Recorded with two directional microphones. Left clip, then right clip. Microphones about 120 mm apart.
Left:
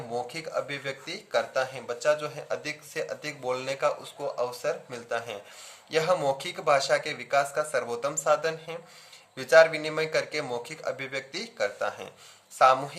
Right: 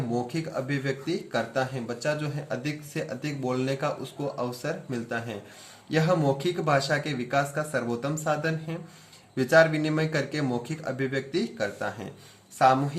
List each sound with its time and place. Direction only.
0.2 s speech: 30° left (ahead or behind)